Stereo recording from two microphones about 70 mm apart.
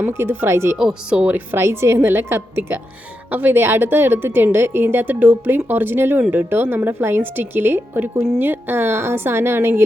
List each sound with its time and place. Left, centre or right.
0.1 s a woman's voice: right
0.8 s speech: centre
1.2 s a woman's voice: right